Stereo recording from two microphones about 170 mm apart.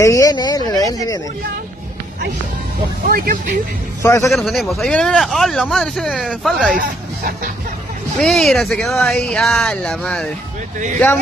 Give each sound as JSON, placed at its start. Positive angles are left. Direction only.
{"t": 0.0, "sound": "speech", "side_deg": 20}
{"t": 3.1, "sound": "speech", "side_deg": -55}
{"t": 4.0, "sound": "a man's voice", "side_deg": 15}
{"t": 4.3, "sound": "speech", "side_deg": 0}
{"t": 6.8, "sound": "speech", "side_deg": -60}
{"t": 8.2, "sound": "speech", "side_deg": 0}